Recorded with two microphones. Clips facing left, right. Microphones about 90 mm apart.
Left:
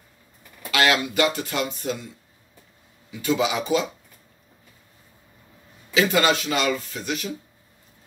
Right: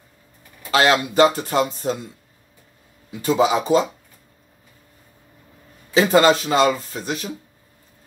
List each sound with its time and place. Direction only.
0.7 s speech: 30° right (ahead or behind)
3.1 s speech: 35° right (ahead or behind)
5.9 s speech: 35° right (ahead or behind)